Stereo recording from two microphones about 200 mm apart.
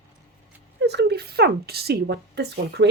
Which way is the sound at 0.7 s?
55° right (ahead or behind).